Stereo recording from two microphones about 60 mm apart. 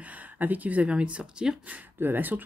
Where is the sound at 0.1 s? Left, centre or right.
Right.